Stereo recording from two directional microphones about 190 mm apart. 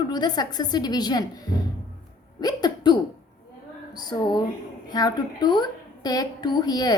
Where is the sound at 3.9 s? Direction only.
20° left (ahead or behind).